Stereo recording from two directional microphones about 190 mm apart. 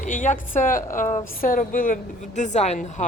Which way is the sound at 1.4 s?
45° left (ahead or behind).